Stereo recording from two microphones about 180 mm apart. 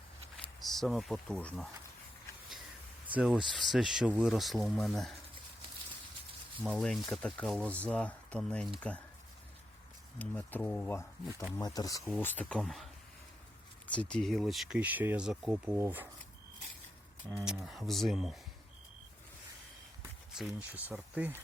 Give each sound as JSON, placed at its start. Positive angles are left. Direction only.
{"t": 0.6, "sound": "speech", "side_deg": 0}
{"t": 3.2, "sound": "speech", "side_deg": -5}
{"t": 6.6, "sound": "speech", "side_deg": 0}
{"t": 10.2, "sound": "speech", "side_deg": 10}
{"t": 11.5, "sound": "speech", "side_deg": 20}
{"t": 12.0, "sound": "speech", "side_deg": 10}
{"t": 17.4, "sound": "speech", "side_deg": 0}
{"t": 20.3, "sound": "speech", "side_deg": 0}